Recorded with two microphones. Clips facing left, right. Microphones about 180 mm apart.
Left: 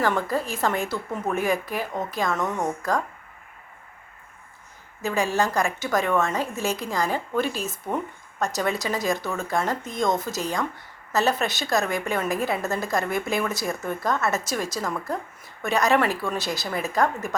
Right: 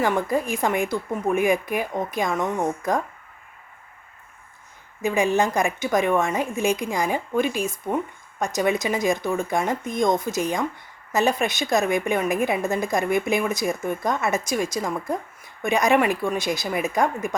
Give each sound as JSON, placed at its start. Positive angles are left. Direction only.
{"t": 0.0, "sound": "a woman's voice", "side_deg": -15}
{"t": 5.0, "sound": "a woman's voice", "side_deg": -20}